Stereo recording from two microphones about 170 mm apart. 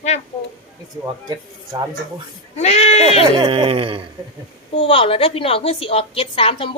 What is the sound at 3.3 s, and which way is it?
Speech, 30° right (ahead or behind).